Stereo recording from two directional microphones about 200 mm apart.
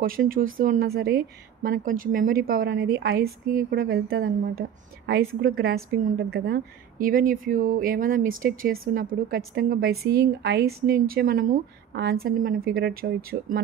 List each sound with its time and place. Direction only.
0.0 s a woman's voice: 45° right (ahead or behind)